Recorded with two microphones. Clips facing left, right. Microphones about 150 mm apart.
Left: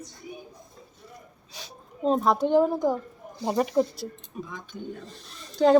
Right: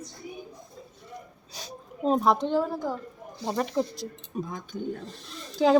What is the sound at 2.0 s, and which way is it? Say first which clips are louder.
Speech: even; centre (ahead or behind).